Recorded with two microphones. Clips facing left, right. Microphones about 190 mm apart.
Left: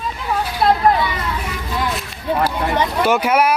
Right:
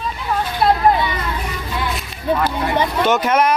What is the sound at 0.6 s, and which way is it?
Speech, 5° right (ahead or behind).